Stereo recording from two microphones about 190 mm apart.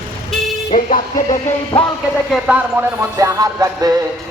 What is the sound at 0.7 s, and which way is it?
Speech, 45° left (ahead or behind).